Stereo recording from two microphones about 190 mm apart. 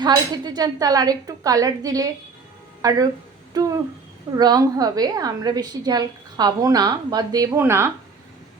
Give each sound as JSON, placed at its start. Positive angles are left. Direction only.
{"t": 0.0, "sound": "a woman's voice", "side_deg": -20}